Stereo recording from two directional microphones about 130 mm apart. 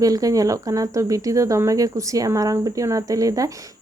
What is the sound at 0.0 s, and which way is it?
Speech, 25° right (ahead or behind).